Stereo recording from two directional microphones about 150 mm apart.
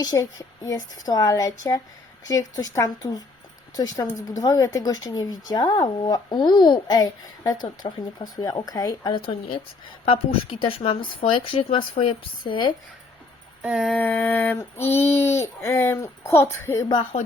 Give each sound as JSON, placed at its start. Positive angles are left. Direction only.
{"t": 0.0, "sound": "speech", "side_deg": 25}
{"t": 13.6, "sound": "a sound", "side_deg": -5}
{"t": 13.8, "sound": "a woman's voice", "side_deg": 10}